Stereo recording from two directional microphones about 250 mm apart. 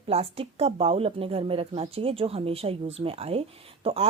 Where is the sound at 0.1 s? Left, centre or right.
Right.